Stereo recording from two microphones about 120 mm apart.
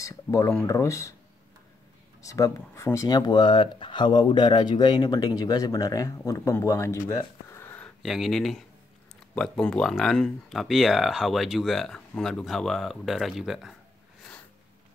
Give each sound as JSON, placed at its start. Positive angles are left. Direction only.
{"t": 0.0, "sound": "speech", "side_deg": 25}
{"t": 2.2, "sound": "speech", "side_deg": 25}
{"t": 7.5, "sound": "a sound", "side_deg": 15}
{"t": 8.0, "sound": "speech", "side_deg": 0}